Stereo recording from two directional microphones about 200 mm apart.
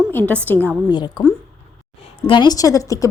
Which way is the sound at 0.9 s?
20° left (ahead or behind).